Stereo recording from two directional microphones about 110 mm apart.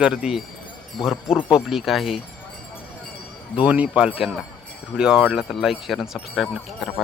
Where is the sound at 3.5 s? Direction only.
10° right (ahead or behind).